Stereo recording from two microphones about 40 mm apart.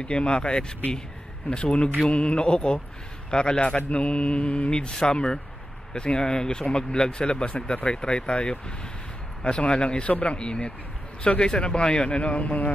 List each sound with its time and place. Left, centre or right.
0.0 s speech: left